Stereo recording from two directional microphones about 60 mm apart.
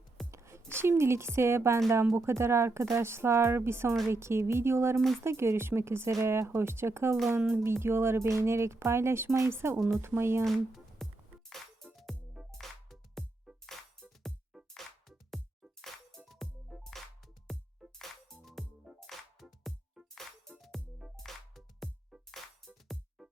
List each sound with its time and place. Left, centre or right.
0.3 s speech: right
10.4 s music: centre
15.8 s music: centre
18.0 s music: centre